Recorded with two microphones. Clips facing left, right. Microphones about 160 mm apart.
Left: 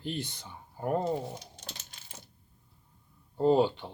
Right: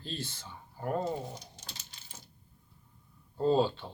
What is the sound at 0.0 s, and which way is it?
Speech, 15° left (ahead or behind).